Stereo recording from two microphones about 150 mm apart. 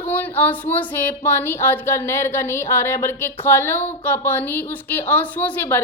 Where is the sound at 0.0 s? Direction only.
10° left (ahead or behind).